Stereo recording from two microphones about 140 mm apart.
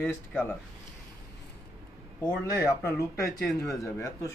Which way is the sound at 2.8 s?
20° left (ahead or behind).